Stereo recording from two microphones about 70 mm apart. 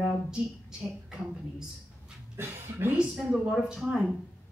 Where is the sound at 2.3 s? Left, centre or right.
Right.